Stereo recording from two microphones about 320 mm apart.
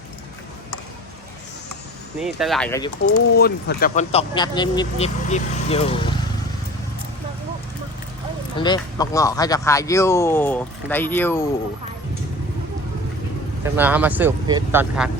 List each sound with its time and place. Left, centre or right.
2.1 s speech: centre
3.3 s speech: left
8.5 s speech: centre
13.7 s speech: centre